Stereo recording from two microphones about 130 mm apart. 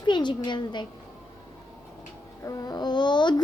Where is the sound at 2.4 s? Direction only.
30° left (ahead or behind).